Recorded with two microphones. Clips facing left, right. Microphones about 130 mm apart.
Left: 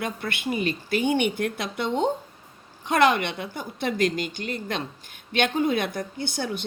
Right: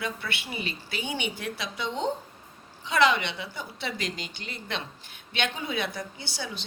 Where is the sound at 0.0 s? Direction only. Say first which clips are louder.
Left 5 dB; 50° left (ahead or behind).